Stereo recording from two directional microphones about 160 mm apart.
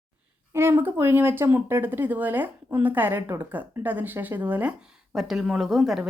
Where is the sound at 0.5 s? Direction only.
15° right (ahead or behind).